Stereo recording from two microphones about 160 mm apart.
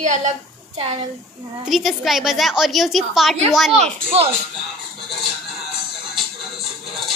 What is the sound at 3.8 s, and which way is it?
Speech, 40° right (ahead or behind).